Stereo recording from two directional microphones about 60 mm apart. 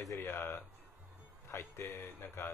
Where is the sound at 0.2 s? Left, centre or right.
Left.